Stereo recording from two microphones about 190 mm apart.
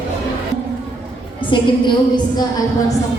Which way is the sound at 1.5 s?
25° left (ahead or behind).